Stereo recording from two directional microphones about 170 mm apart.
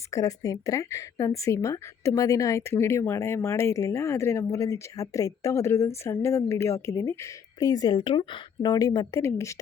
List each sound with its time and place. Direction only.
0.1 s a woman's voice: 20° left (ahead or behind)